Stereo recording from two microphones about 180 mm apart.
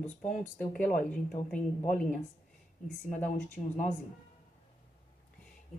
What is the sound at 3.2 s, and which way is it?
Speech, 10° left (ahead or behind).